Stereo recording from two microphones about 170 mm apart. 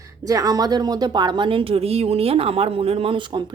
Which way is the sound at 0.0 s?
20° right (ahead or behind).